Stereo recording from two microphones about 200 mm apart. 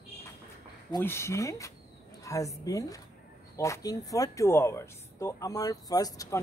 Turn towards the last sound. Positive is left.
turn(degrees=15)  # may be behind; listen again after turning